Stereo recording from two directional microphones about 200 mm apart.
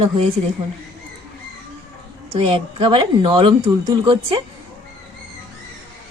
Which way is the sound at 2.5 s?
25° right (ahead or behind).